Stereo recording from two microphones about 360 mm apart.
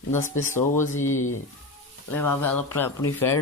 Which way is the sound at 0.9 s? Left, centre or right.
Left.